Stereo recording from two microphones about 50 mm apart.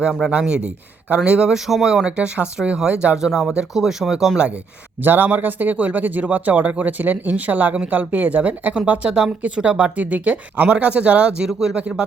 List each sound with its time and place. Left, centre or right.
0.3 s speech: right
1.5 s speech: centre
2.1 s speech: right
5.0 s speech: right
8.9 s speech: right
11.4 s speech: centre
11.8 s speech: right